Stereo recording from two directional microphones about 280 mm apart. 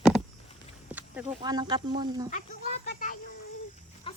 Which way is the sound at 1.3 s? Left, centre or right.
Centre.